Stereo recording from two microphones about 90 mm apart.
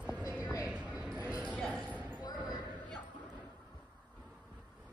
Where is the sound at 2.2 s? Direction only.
50° left (ahead or behind).